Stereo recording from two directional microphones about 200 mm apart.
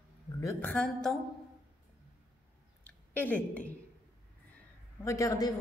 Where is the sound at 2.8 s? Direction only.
10° left (ahead or behind).